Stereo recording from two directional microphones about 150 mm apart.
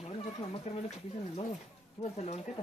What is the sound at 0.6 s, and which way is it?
A woman's voice, 45° left (ahead or behind).